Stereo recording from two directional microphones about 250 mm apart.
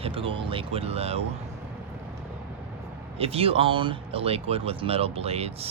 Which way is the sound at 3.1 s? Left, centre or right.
Right.